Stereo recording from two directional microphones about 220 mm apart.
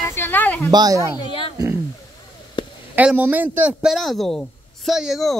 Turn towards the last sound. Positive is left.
turn(degrees=0)  # may be behind; listen again after turning